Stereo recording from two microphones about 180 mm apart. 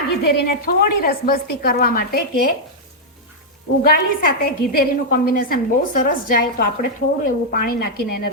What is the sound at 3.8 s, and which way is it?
A woman's voice, 55° left (ahead or behind).